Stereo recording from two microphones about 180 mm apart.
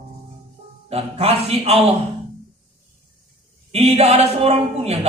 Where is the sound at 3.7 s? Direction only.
35° right (ahead or behind).